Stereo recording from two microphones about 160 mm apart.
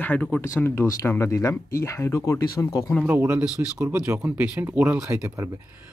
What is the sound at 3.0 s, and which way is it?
Speech, 10° right (ahead or behind).